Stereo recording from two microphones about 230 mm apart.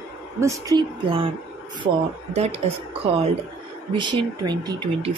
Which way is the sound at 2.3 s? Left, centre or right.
Right.